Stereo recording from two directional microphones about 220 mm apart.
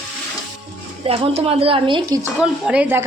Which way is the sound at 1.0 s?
25° right (ahead or behind).